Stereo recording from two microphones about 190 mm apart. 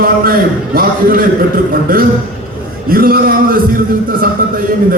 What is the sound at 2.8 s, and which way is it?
A man's voice, 50° right (ahead or behind).